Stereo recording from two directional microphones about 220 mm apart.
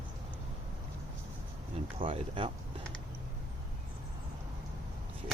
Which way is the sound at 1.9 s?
25° right (ahead or behind).